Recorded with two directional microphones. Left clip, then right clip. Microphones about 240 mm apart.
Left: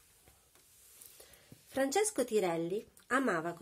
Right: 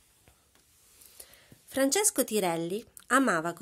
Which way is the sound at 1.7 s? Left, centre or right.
Right.